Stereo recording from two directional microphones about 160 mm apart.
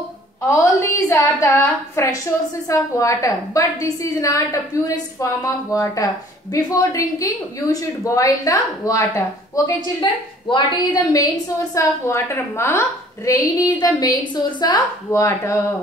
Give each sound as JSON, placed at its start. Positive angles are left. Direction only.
{"t": 0.5, "sound": "a woman's voice", "side_deg": 20}
{"t": 10.5, "sound": "a woman's voice", "side_deg": 25}